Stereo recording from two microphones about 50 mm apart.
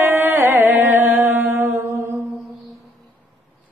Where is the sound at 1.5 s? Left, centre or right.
Right.